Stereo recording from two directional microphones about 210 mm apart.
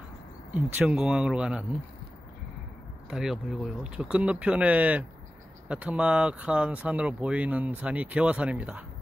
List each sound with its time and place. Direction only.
0.5 s speech: 10° right (ahead or behind)
3.1 s speech: centre (ahead or behind)